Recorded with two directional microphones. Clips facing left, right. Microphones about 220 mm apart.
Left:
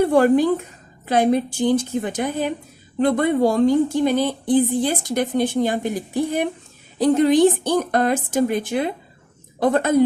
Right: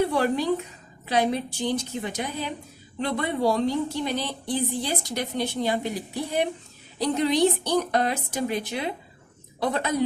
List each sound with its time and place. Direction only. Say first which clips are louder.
0.0 s a woman's voice: left 8 dB; 50° left (ahead or behind)